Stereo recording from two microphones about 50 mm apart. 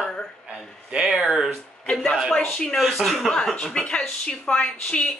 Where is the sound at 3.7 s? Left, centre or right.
Centre.